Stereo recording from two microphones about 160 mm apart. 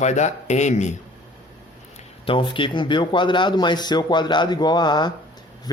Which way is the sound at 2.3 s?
30° left (ahead or behind).